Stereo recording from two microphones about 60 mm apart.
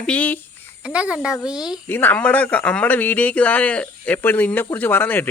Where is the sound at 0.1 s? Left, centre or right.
Left.